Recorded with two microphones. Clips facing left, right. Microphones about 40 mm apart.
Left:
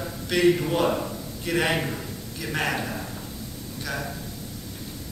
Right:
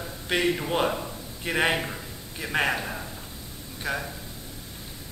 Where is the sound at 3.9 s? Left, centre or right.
Right.